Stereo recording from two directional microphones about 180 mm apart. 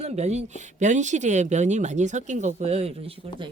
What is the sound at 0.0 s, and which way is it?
Speech, 40° right (ahead or behind).